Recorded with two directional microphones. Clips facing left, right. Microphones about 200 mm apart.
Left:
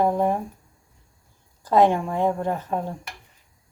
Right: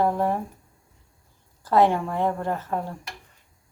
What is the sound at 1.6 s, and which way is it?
Speech, 15° left (ahead or behind).